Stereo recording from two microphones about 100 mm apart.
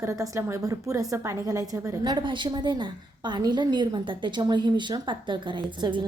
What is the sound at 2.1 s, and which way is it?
A woman's voice, 50° right (ahead or behind).